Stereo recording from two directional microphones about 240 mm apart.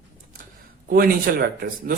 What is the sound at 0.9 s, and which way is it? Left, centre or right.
Speech, right.